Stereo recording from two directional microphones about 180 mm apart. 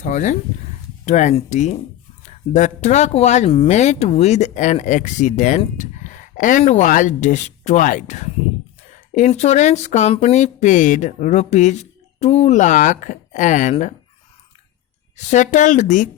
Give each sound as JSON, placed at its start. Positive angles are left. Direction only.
{"t": 0.0, "sound": "speech", "side_deg": 40}
{"t": 15.1, "sound": "speech", "side_deg": 40}